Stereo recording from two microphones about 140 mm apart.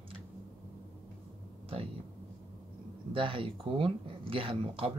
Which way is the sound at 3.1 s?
40° right (ahead or behind).